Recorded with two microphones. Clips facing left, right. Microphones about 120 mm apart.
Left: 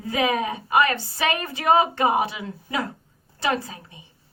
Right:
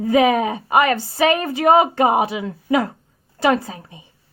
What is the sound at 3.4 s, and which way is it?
Speech, 50° right (ahead or behind).